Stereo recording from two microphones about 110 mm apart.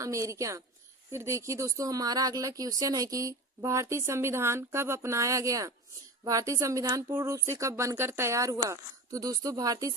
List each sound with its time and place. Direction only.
0.0 s speech: 30° right (ahead or behind)